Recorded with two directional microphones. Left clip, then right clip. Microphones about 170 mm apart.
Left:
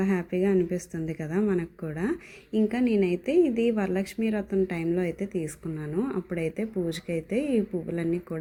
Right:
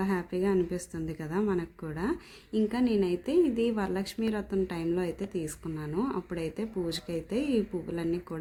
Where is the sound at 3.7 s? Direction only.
10° left (ahead or behind).